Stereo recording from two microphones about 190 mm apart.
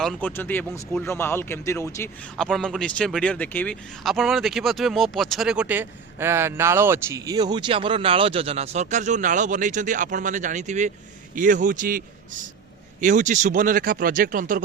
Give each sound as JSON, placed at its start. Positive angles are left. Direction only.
{"t": 0.0, "sound": "speech", "side_deg": 5}
{"t": 2.4, "sound": "speech", "side_deg": 0}